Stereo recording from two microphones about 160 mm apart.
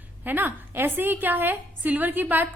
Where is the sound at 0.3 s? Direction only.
10° right (ahead or behind).